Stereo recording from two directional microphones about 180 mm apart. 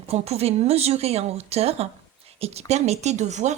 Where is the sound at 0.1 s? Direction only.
35° right (ahead or behind).